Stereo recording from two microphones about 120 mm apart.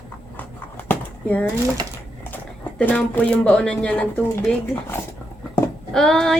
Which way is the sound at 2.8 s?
15° left (ahead or behind).